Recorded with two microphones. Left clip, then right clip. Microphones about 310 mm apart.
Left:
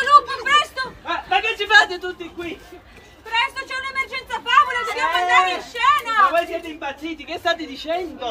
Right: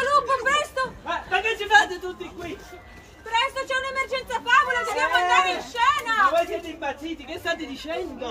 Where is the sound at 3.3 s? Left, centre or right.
Centre.